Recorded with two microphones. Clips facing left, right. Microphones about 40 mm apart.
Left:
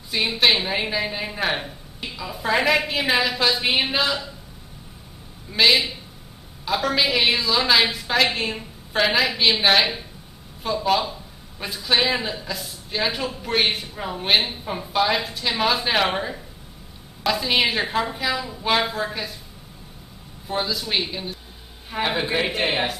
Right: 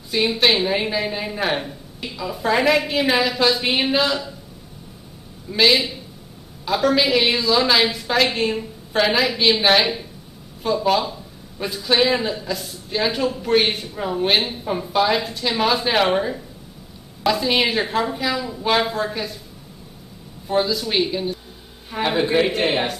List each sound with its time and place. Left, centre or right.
0.1 s a man's voice: centre
5.5 s a man's voice: centre
20.4 s a man's voice: centre